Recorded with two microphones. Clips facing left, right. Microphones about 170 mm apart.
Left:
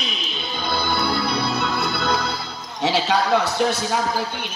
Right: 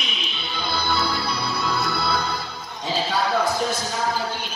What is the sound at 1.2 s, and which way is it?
Music, 65° left (ahead or behind).